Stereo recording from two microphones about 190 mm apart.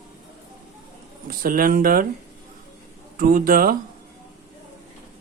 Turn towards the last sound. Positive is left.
turn(degrees=-50)  # may be behind; listen again after turning